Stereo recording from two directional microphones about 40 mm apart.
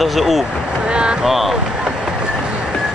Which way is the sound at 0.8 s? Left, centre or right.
Right.